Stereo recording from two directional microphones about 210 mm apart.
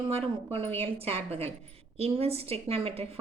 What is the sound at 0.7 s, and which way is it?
A woman's voice, 30° right (ahead or behind).